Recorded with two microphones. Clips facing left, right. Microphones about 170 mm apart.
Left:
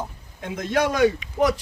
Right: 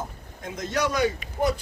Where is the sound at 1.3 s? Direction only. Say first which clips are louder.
Left 2 dB; 90° left.